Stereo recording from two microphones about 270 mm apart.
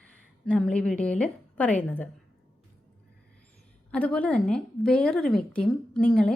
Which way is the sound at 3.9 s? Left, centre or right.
Centre.